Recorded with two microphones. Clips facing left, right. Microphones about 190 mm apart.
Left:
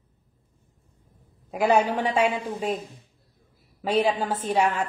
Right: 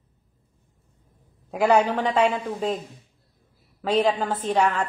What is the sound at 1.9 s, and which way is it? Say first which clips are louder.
Speech: right 2 dB; 10° left (ahead or behind).